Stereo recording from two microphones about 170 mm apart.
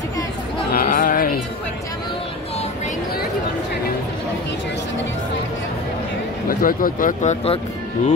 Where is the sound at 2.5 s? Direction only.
45° left (ahead or behind).